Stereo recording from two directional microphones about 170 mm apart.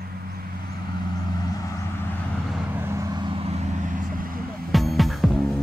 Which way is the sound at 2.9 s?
20° right (ahead or behind).